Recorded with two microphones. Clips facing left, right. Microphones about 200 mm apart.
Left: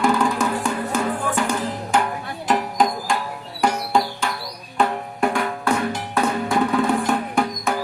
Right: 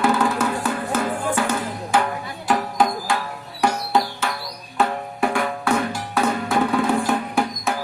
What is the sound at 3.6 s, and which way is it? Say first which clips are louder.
Music: even; 5° right (ahead or behind).